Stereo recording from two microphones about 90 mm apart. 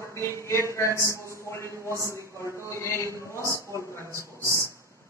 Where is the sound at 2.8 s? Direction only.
30° left (ahead or behind).